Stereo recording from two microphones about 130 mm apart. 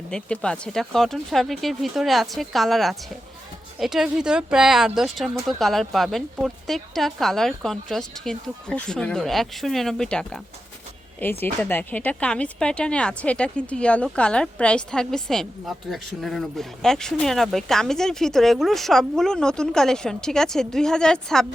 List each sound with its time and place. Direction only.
0.1 s speech: 10° left (ahead or behind)
11.2 s speech: 15° left (ahead or behind)